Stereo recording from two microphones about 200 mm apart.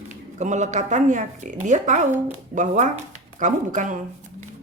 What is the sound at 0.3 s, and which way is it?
A woman's voice, 35° right (ahead or behind).